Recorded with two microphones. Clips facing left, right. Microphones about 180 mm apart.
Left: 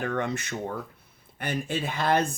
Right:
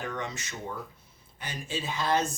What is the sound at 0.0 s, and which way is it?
Speech, 55° left (ahead or behind).